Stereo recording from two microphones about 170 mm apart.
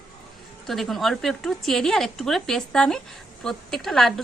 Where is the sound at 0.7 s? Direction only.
Centre (ahead or behind).